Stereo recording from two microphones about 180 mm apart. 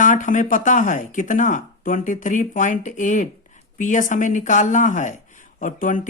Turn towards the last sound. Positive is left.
turn(degrees=45)  # may be behind; listen again after turning